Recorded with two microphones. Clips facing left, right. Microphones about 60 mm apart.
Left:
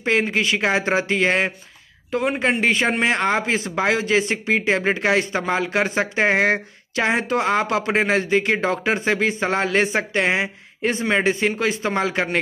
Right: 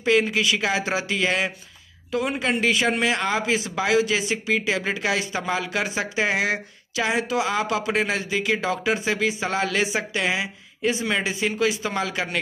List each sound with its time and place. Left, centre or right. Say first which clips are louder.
0.0 s speech: even; left